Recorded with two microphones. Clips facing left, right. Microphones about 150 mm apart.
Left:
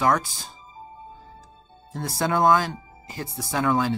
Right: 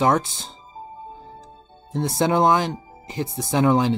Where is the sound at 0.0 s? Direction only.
25° right (ahead or behind).